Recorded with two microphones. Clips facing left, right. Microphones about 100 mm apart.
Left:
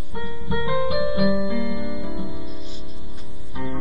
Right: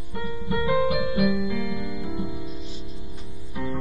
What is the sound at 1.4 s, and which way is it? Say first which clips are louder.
Music: left 3 dB; 15° left (ahead or behind).